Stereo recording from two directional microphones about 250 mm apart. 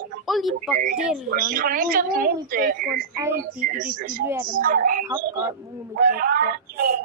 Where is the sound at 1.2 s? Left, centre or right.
Right.